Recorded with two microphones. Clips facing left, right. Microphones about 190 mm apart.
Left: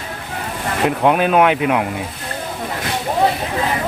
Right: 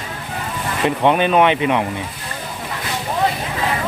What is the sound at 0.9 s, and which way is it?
Speech, 5° left (ahead or behind).